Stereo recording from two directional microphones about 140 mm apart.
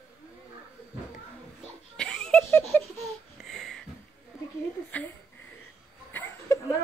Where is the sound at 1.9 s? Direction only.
5° left (ahead or behind).